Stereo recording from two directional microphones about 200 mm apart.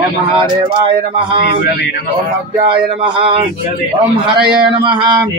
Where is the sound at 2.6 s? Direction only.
25° right (ahead or behind).